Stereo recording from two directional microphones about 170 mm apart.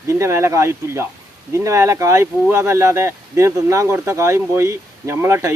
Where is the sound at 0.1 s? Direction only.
15° right (ahead or behind).